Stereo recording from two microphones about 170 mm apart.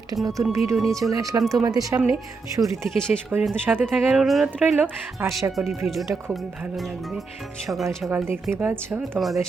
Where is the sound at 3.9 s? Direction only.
Centre (ahead or behind).